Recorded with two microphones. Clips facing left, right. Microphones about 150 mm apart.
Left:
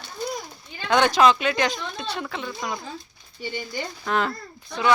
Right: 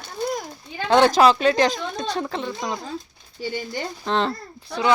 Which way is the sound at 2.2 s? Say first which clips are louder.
Right 4 dB; 30° right (ahead or behind).